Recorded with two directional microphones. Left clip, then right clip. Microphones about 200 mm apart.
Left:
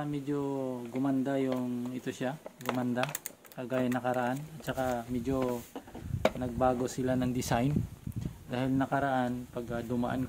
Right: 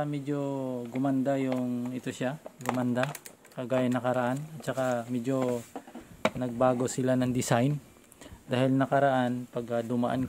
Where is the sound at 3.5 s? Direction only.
50° right (ahead or behind).